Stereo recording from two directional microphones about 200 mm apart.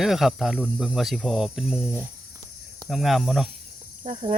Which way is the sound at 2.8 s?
Centre (ahead or behind).